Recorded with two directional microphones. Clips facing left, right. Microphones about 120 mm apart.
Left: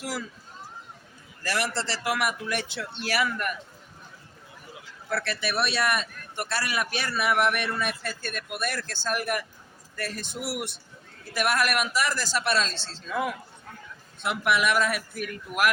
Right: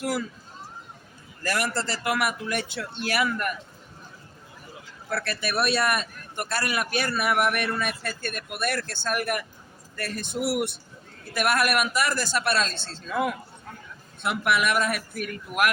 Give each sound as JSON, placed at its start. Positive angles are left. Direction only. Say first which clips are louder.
{"t": 1.5, "sound": "a man's voice", "louder": "right 2 dB", "side_deg": -50}
{"t": 5.2, "sound": "a man's voice", "louder": "right 3 dB", "side_deg": -50}
{"t": 14.2, "sound": "a man's voice", "louder": "right 1 dB", "side_deg": -55}